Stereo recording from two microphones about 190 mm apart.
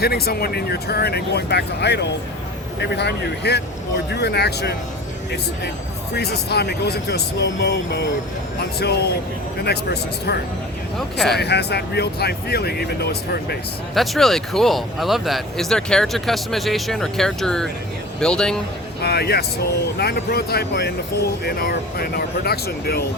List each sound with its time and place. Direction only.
0.0 s speech: 55° left (ahead or behind)
6.1 s speech: 55° left (ahead or behind)
10.9 s speech: centre (ahead or behind)
11.3 s speech: 60° left (ahead or behind)
13.9 s speech: centre (ahead or behind)
19.0 s speech: 55° left (ahead or behind)